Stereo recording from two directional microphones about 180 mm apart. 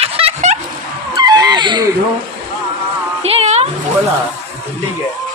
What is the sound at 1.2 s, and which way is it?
Wail, 20° right (ahead or behind).